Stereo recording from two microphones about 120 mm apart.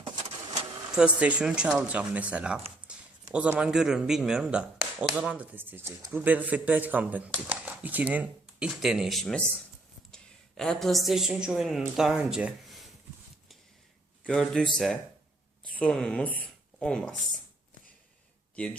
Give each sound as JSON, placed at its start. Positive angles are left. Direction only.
{"t": 0.9, "sound": "a woman's voice", "side_deg": -10}
{"t": 5.4, "sound": "speech", "side_deg": -15}
{"t": 10.6, "sound": "a woman's voice", "side_deg": 5}
{"t": 14.3, "sound": "a woman's voice", "side_deg": 5}
{"t": 18.5, "sound": "speech", "side_deg": 10}